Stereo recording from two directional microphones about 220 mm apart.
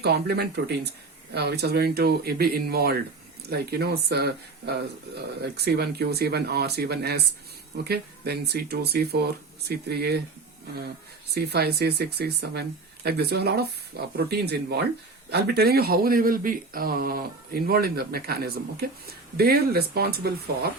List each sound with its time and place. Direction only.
0.0 s a man's voice: 45° right (ahead or behind)
11.3 s a man's voice: 45° right (ahead or behind)